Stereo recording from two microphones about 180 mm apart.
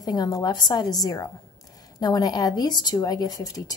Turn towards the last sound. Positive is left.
turn(degrees=20)  # may be behind; listen again after turning